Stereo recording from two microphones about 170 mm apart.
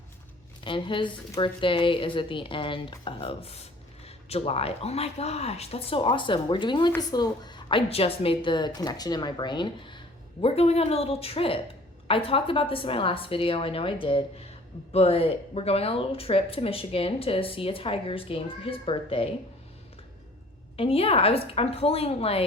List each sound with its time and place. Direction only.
0.6 s a woman's voice: 30° left (ahead or behind)
20.7 s speech: 35° left (ahead or behind)